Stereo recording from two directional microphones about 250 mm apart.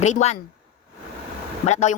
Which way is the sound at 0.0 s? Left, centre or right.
Left.